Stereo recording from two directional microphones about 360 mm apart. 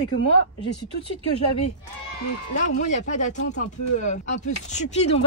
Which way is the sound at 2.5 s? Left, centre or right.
Centre.